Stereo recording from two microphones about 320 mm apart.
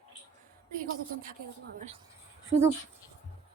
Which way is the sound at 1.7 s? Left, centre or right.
Right.